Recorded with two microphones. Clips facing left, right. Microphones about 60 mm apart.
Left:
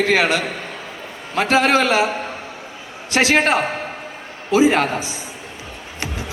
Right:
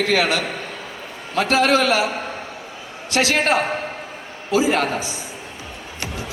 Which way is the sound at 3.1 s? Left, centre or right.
Left.